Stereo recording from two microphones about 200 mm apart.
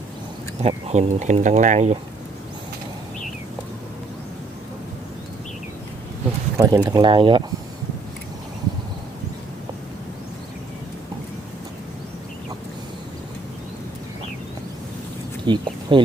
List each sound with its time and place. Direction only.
0.6 s speech: 35° right (ahead or behind)
6.6 s speech: 20° right (ahead or behind)
15.4 s speech: 25° right (ahead or behind)